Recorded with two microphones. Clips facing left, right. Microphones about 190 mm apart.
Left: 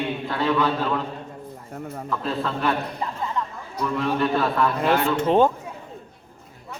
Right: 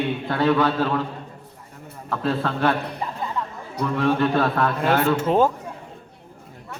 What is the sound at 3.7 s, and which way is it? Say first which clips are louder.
Speech: right 3 dB; 50° right (ahead or behind).